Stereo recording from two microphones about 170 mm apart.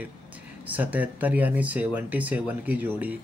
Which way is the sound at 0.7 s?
10° right (ahead or behind).